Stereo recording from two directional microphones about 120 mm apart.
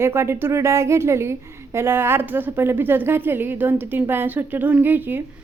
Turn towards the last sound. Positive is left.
turn(degrees=-15)  # may be behind; listen again after turning